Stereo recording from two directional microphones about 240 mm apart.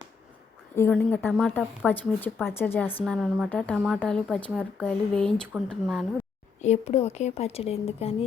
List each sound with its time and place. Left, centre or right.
0.8 s speech: centre
6.6 s speech: left